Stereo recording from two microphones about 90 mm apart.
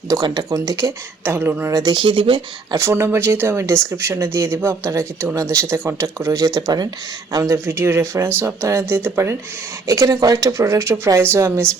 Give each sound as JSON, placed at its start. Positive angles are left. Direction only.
{"t": 0.1, "sound": "speech", "side_deg": -50}
{"t": 1.2, "sound": "speech", "side_deg": -25}
{"t": 1.9, "sound": "speech", "side_deg": -65}
{"t": 2.7, "sound": "speech", "side_deg": -30}
{"t": 9.8, "sound": "speech", "side_deg": -40}